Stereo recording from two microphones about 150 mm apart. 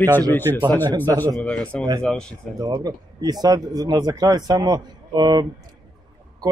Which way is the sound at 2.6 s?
25° right (ahead or behind).